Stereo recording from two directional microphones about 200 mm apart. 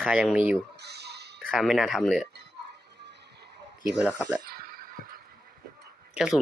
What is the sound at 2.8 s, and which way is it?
Music, 55° right (ahead or behind).